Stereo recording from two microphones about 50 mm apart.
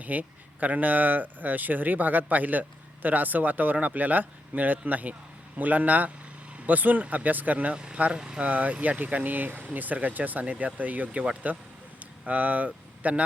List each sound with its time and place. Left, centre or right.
0.0 s speech: right
7.7 s speech: right
8.4 s speech: right
11.9 s a sound: right